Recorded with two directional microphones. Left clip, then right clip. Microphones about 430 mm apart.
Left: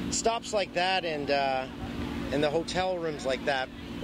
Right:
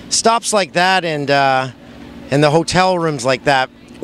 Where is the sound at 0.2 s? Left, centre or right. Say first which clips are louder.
Right 14 dB; right.